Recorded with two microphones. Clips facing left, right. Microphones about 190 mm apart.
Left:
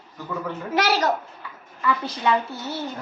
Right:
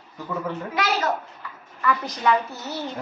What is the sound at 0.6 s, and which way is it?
Speech, 40° left (ahead or behind).